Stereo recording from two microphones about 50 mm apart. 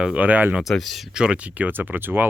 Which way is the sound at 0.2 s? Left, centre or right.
Right.